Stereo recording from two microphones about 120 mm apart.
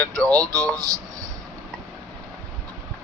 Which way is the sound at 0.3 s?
30° right (ahead or behind).